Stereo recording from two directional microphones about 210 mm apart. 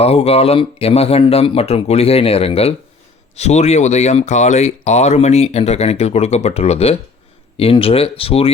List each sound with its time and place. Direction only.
0.0 s speech: 30° left (ahead or behind)